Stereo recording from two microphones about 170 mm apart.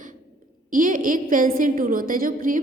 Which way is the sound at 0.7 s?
50° right (ahead or behind).